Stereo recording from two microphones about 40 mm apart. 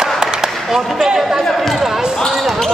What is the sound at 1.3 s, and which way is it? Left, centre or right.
Chatter, centre.